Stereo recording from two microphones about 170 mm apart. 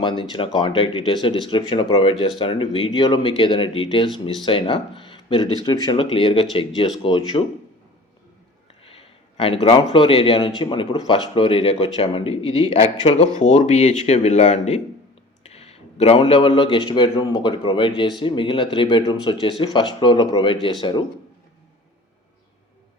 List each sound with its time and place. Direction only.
0.0 s a man's voice: 25° left (ahead or behind)
8.8 s a man's voice: 35° left (ahead or behind)